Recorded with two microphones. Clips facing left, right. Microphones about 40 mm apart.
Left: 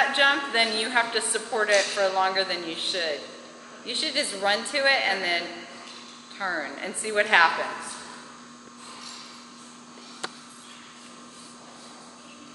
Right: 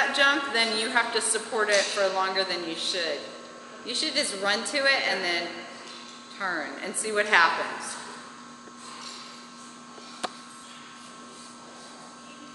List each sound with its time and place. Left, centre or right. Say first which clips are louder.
0.0 s a sound: left 1 dB; centre
0.8 s speech: left 1 dB; centre
1.1 s speech: left 1 dB; centre
2.1 s speech: left 2 dB; centre
6.3 s speech: left 1 dB; centre
6.8 s speech: left 3 dB; centre
7.5 s speech: left 1 dB; centre